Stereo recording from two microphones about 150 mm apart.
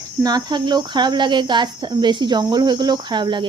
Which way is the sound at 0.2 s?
25° right (ahead or behind).